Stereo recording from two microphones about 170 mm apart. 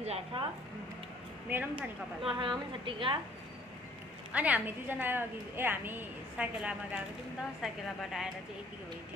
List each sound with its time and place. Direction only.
0.0 s speech: 35° right (ahead or behind)
1.5 s a woman's voice: 5° right (ahead or behind)
2.2 s a woman's voice: 30° right (ahead or behind)
4.3 s a woman's voice: 10° right (ahead or behind)